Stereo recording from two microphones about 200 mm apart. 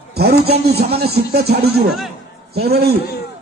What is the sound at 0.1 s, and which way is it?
A man's voice, 55° right (ahead or behind).